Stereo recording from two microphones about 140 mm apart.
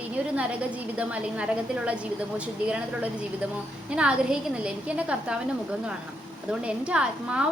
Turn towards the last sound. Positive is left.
turn(degrees=-5)  # may be behind; listen again after turning